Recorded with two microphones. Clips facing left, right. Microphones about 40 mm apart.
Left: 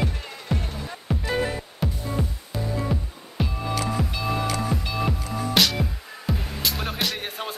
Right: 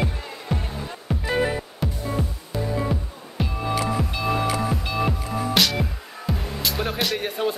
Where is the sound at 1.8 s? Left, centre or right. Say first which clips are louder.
Left 2 dB; centre.